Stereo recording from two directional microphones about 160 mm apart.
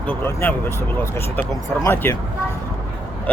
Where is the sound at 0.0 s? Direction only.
10° left (ahead or behind).